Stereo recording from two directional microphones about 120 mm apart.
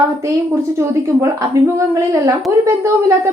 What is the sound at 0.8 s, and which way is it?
A woman's voice, 25° right (ahead or behind).